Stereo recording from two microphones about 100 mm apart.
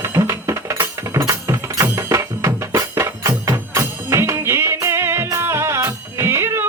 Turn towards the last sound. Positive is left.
turn(degrees=-25)  # may be behind; listen again after turning